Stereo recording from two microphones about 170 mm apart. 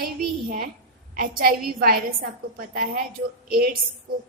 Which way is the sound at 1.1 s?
60° right (ahead or behind).